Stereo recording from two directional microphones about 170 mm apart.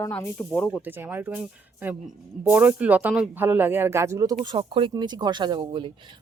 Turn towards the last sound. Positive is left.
turn(degrees=-25)  # may be behind; listen again after turning